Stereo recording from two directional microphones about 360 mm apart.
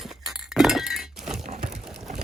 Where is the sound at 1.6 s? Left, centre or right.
Centre.